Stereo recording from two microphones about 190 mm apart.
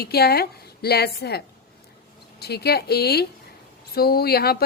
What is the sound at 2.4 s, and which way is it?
Speech, 55° left (ahead or behind).